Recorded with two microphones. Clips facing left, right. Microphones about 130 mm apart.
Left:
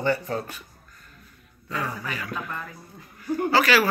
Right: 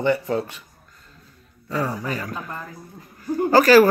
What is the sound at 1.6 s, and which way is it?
A man's voice, 35° right (ahead or behind).